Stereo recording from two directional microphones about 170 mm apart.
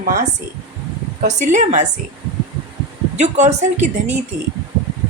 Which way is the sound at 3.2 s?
45° right (ahead or behind).